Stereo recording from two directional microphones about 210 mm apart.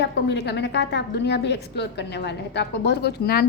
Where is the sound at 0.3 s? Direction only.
55° left (ahead or behind).